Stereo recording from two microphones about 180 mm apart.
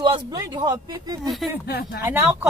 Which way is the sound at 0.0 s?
25° right (ahead or behind).